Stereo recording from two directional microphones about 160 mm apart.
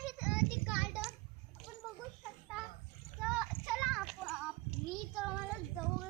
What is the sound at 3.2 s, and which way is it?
Child singing, centre (ahead or behind).